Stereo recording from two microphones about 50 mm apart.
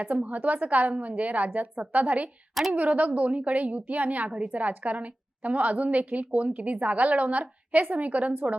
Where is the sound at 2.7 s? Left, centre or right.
Right.